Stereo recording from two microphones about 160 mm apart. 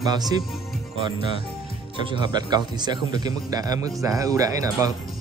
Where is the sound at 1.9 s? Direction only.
30° right (ahead or behind).